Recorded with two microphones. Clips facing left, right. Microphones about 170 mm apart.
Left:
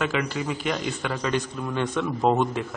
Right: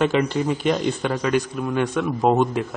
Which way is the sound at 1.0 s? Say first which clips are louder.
Right 3 dB; 15° right (ahead or behind).